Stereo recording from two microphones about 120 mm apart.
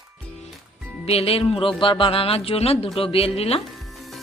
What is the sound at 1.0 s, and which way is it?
A woman's voice, 55° left (ahead or behind).